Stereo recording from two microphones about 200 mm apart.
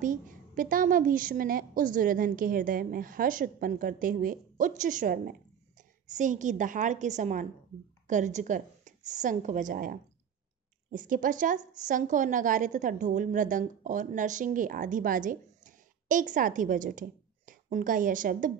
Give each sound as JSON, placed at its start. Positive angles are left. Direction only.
{"t": 0.0, "sound": "a woman's voice", "side_deg": -40}